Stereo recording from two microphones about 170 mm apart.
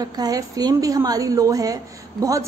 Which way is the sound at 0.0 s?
20° right (ahead or behind).